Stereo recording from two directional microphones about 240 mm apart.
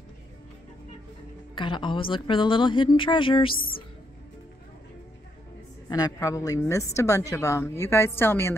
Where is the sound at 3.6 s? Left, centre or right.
Left.